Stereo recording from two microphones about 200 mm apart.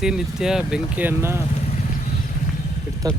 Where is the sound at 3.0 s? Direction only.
15° right (ahead or behind).